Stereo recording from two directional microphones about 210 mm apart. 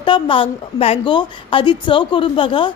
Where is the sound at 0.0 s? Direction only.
25° left (ahead or behind).